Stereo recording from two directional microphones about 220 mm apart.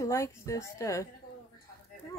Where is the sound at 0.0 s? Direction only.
15° left (ahead or behind).